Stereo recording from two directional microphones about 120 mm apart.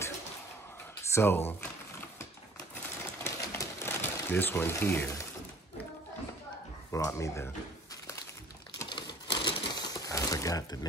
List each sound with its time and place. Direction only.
1.1 s speech: 20° left (ahead or behind)
1.6 s a sound: 20° left (ahead or behind)
3.3 s sewing machine: 25° left (ahead or behind)
6.9 s speech: 25° left (ahead or behind)
8.8 s crumpling: 40° left (ahead or behind)